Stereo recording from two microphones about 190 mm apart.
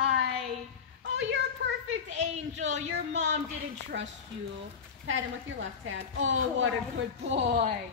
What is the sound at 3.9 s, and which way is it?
Speech, 60° right (ahead or behind).